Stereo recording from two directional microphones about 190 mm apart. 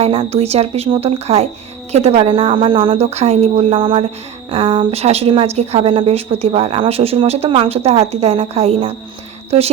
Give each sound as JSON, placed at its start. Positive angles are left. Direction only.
{"t": 0.0, "sound": "a woman's voice", "side_deg": -30}